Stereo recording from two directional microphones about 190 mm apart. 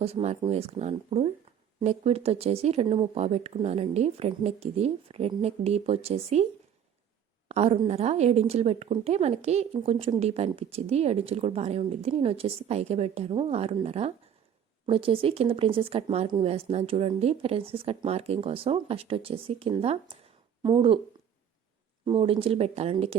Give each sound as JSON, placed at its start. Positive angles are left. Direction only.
{"t": 0.0, "sound": "a woman's voice", "side_deg": -35}
{"t": 7.4, "sound": "a woman's voice", "side_deg": -35}
{"t": 22.0, "sound": "a woman's voice", "side_deg": -30}